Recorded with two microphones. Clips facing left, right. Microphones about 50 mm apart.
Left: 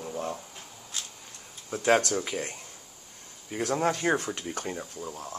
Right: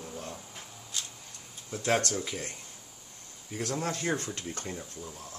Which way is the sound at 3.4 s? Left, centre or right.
Left.